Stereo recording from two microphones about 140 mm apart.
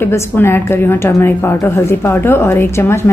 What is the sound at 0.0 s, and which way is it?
A woman's voice, 15° left (ahead or behind).